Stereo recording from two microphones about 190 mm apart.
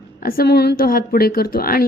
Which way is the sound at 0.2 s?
50° left (ahead or behind).